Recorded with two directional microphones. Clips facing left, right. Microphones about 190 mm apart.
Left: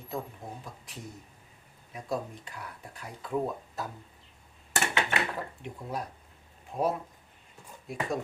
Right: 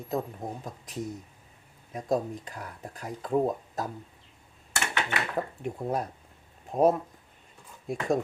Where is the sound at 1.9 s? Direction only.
45° right (ahead or behind).